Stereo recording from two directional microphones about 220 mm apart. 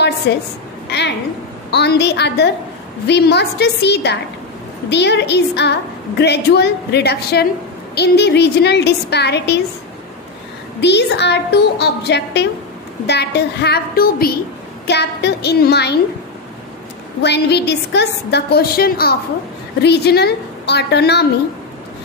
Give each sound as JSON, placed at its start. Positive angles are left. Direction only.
{"t": 0.3, "sound": "a woman's voice", "side_deg": 50}
{"t": 0.8, "sound": "a sound", "side_deg": 50}
{"t": 1.7, "sound": "a woman's voice", "side_deg": 50}
{"t": 10.8, "sound": "a woman's voice", "side_deg": 50}
{"t": 17.2, "sound": "a woman's voice", "side_deg": 50}